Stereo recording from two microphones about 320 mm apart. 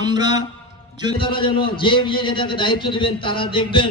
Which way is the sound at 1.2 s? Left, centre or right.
Centre.